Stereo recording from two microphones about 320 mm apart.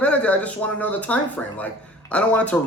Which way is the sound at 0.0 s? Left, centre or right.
Centre.